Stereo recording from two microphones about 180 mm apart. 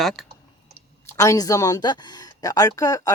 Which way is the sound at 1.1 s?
20° left (ahead or behind).